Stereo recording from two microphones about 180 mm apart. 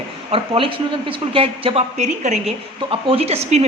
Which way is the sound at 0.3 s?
30° right (ahead or behind).